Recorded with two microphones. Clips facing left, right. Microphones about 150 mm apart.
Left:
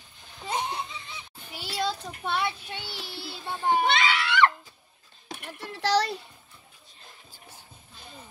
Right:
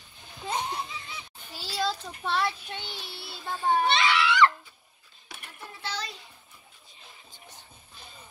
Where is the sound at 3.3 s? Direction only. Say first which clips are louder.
Even; 20° left (ahead or behind).